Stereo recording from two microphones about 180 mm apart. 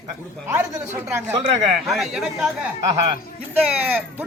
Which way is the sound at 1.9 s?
Centre (ahead or behind).